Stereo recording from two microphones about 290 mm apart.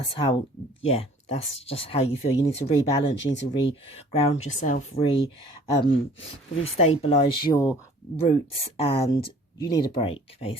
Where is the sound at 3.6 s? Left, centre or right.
Centre.